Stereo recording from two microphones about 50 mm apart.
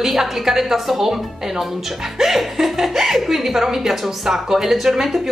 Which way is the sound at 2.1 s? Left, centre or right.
Centre.